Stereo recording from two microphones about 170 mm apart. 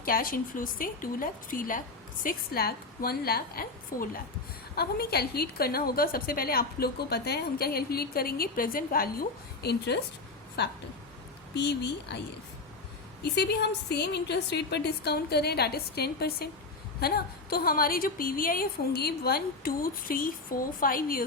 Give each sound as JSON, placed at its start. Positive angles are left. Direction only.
{"t": 0.0, "sound": "a woman's voice", "side_deg": 60}
{"t": 9.6, "sound": "a woman's voice", "side_deg": 75}
{"t": 11.5, "sound": "speech", "side_deg": 85}
{"t": 13.2, "sound": "a woman's voice", "side_deg": 75}